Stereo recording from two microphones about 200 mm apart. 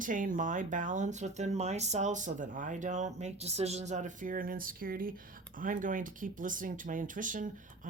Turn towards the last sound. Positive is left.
turn(degrees=-40)  # may be behind; listen again after turning